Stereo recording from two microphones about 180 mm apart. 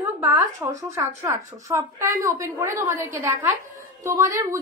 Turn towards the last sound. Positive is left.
turn(degrees=-20)  # may be behind; listen again after turning